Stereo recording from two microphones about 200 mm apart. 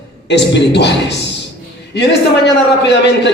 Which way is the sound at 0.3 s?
60° left (ahead or behind).